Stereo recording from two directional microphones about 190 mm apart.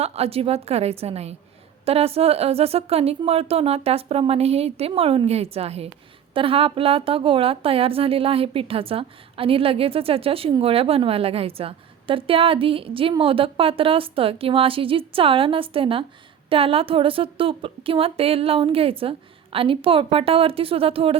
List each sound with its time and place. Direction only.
0.0 s a woman's voice: 30° right (ahead or behind)